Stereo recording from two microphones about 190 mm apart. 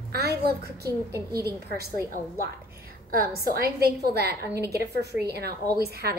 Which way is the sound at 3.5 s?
55° right (ahead or behind).